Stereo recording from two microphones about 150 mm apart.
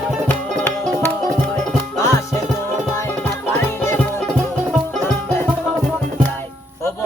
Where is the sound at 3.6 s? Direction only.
15° left (ahead or behind).